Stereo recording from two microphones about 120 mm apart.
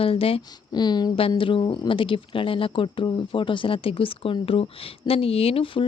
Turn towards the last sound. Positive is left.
turn(degrees=45)  # may be behind; listen again after turning